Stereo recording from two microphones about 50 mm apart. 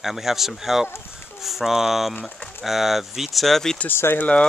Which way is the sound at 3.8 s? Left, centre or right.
Left.